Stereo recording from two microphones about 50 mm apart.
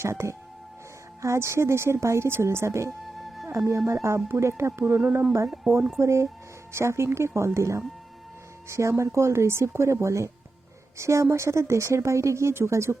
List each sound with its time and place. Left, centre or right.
0.0 s speech: right
3.4 s music: right
3.8 s speech: right
6.0 s speech: right
10.9 s speech: right